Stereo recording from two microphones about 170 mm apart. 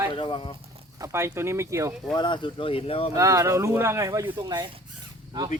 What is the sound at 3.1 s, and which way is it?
Speech, 20° right (ahead or behind).